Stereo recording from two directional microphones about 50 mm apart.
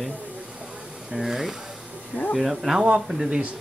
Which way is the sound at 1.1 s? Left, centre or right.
Centre.